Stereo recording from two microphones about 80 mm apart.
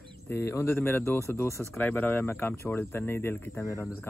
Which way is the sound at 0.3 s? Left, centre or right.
Left.